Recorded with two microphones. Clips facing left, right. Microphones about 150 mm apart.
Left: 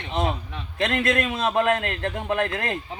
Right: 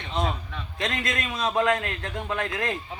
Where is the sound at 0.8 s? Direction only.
60° left (ahead or behind).